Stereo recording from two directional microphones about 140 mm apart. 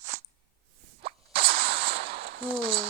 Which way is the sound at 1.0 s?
40° right (ahead or behind).